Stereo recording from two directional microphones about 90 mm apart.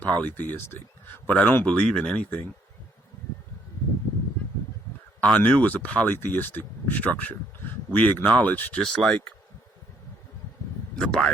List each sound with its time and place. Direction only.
0.0 s speech: 15° left (ahead or behind)
5.2 s speech: 15° left (ahead or behind)
8.8 s speech: 5° left (ahead or behind)
10.9 s speech: 10° left (ahead or behind)